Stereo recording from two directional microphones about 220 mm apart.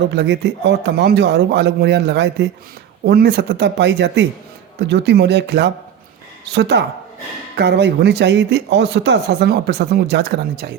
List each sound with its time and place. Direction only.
0.1 s speech: 50° right (ahead or behind)